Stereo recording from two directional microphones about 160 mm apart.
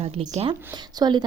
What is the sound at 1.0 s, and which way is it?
Speech, 25° right (ahead or behind).